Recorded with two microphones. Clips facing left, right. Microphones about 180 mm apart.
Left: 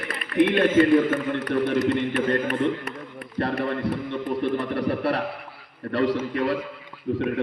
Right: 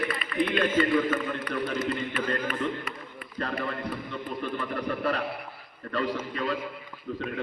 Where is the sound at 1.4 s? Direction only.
70° left (ahead or behind).